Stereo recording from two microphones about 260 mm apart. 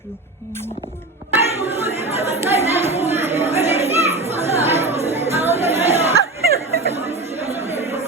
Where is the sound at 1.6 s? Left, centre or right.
Right.